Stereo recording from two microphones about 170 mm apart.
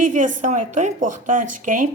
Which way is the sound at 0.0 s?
50° right (ahead or behind).